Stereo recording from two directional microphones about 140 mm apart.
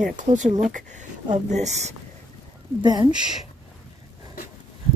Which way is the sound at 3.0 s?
5° right (ahead or behind).